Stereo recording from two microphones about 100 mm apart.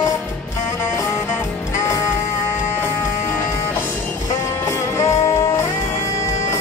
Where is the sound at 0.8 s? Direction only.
25° left (ahead or behind).